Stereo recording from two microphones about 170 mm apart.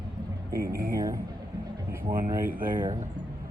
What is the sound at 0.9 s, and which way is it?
Speech, 20° right (ahead or behind).